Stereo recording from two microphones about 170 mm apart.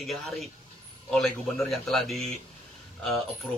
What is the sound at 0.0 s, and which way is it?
A man's voice, centre (ahead or behind).